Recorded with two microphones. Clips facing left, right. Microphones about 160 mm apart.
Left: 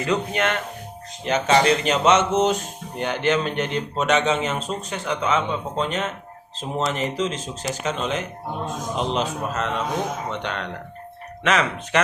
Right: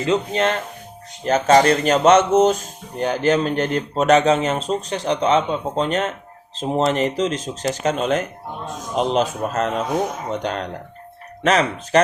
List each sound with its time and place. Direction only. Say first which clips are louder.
0.0 s speech: right 3 dB; 25° right (ahead or behind)
1.2 s speech: right 4 dB; 40° right (ahead or behind)